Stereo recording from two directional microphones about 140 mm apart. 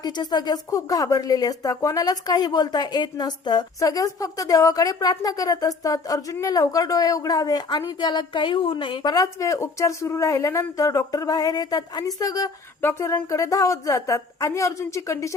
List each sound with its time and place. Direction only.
0.0 s a woman's voice: 30° left (ahead or behind)